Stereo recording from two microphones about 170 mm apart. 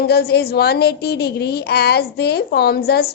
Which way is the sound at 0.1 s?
70° left (ahead or behind).